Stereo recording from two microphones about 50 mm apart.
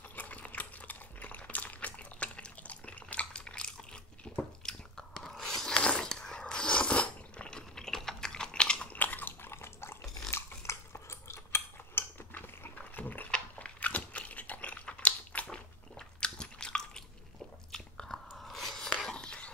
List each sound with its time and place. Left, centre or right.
0.1 s a sound: left
8.9 s biting: left
9.5 s water: left
10.3 s cutlery: left
12.9 s a sound: left
13.3 s biting: left
16.2 s chewing: centre
17.6 s biting: centre
19.1 s a sound: centre